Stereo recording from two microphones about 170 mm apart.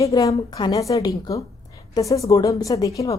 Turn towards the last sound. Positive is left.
turn(degrees=20)  # may be behind; listen again after turning